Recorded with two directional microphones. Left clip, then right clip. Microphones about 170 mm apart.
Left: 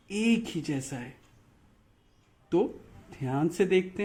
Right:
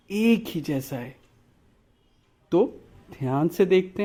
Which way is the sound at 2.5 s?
35° right (ahead or behind).